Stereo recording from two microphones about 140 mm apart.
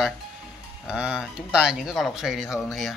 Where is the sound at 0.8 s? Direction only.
5° right (ahead or behind).